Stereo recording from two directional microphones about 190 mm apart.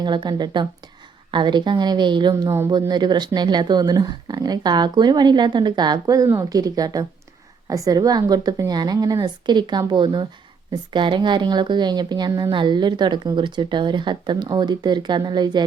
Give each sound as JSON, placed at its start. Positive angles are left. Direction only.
{"t": 0.0, "sound": "a woman's voice", "side_deg": -25}